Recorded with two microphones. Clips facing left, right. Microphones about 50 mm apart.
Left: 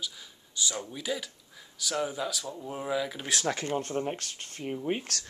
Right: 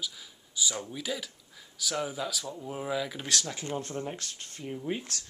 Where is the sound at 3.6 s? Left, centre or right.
Left.